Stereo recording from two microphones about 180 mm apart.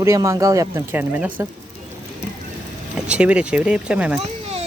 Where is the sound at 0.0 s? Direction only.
15° right (ahead or behind).